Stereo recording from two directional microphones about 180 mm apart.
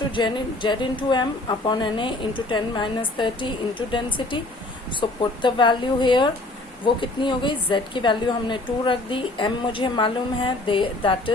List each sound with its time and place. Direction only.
0.1 s a woman's voice: 25° left (ahead or behind)